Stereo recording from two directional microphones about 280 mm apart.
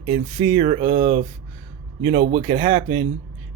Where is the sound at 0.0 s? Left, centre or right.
Centre.